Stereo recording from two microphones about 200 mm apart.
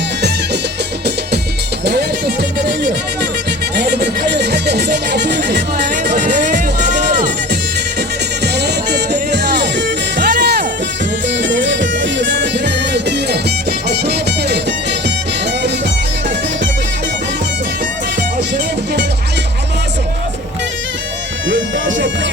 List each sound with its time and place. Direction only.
1.8 s a sound: 55° right (ahead or behind)
3.8 s music: 55° right (ahead or behind)
6.1 s a sound: 40° right (ahead or behind)
8.5 s music: 55° right (ahead or behind)
11.3 s music: 65° right (ahead or behind)
21.5 s music: 65° right (ahead or behind)